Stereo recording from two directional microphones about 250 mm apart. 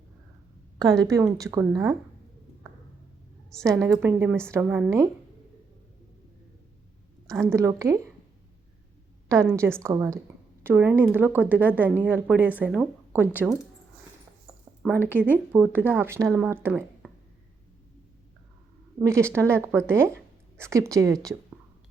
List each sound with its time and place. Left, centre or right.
0.8 s speech: centre
3.8 s speech: centre
7.4 s speech: centre
9.3 s speech: centre
14.8 s speech: centre
19.0 s speech: centre